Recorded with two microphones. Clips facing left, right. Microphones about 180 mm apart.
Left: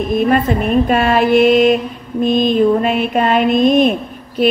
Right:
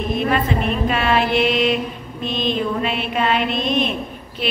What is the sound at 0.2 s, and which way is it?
A woman's voice, 45° left (ahead or behind).